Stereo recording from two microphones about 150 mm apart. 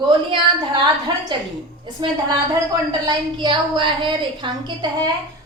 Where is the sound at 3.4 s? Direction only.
30° right (ahead or behind).